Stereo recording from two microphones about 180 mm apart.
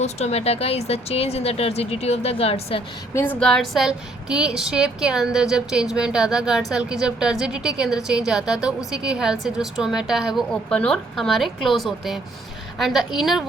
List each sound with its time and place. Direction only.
0.0 s speech: 35° left (ahead or behind)
3.2 s a woman's voice: 10° left (ahead or behind)